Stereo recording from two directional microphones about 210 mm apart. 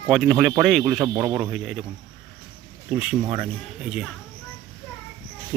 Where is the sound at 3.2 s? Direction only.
25° right (ahead or behind).